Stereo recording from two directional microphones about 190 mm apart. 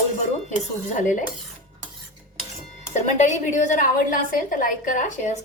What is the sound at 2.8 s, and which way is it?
A woman's voice, 35° left (ahead or behind).